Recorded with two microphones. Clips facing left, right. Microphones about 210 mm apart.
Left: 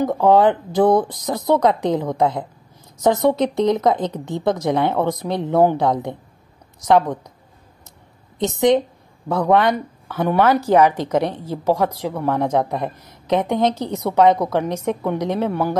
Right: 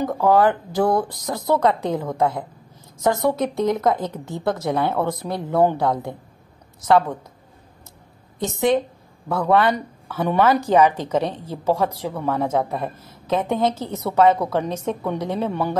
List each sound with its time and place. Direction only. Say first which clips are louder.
0.0 s a woman's voice: left 3 dB; 20° left (ahead or behind)
8.4 s a woman's voice: left 3 dB; 15° left (ahead or behind)